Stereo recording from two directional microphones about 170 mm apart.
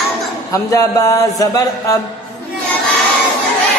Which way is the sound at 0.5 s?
20° left (ahead or behind).